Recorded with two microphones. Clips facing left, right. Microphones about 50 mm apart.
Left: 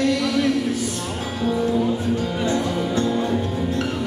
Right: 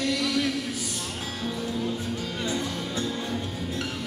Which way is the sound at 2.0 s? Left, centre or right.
Centre.